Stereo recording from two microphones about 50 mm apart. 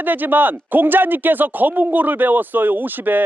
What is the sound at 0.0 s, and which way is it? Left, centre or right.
Speech, right.